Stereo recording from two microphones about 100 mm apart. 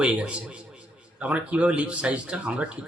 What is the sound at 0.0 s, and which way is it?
A man's voice, 10° right (ahead or behind).